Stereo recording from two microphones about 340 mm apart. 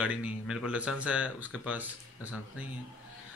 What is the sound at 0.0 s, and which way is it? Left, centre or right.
Speech, centre.